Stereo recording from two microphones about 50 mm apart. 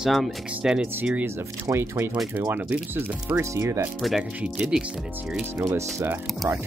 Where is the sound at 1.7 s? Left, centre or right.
Right.